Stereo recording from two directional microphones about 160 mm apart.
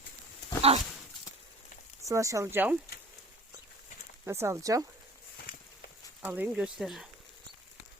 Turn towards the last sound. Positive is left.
turn(degrees=0)  # may be behind; listen again after turning